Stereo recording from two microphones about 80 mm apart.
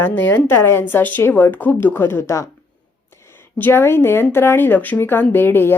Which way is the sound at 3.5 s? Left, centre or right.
Left.